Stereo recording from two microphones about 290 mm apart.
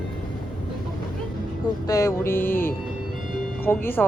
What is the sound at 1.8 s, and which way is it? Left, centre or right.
Mantra, centre.